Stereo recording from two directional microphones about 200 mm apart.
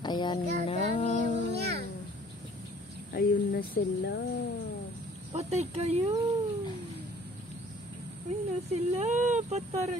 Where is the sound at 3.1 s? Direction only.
50° left (ahead or behind).